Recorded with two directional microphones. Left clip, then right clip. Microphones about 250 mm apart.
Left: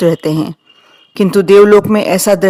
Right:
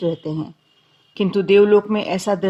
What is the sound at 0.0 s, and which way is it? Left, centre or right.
Speech, left.